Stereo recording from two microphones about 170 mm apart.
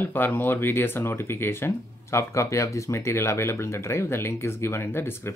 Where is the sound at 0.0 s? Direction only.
10° left (ahead or behind).